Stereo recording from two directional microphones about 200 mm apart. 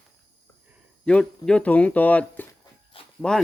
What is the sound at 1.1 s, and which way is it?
Speech, 5° left (ahead or behind).